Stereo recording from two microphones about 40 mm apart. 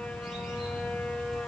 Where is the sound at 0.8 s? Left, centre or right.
Left.